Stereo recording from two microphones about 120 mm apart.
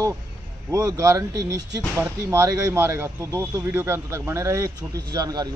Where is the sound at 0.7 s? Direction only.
25° right (ahead or behind).